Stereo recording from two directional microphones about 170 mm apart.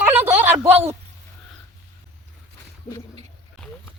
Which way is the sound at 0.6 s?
40° right (ahead or behind).